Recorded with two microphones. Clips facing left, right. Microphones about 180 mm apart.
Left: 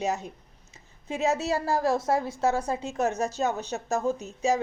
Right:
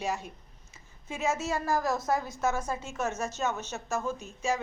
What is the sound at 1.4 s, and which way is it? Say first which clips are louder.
A woman's voice: left 4 dB; 35° left (ahead or behind).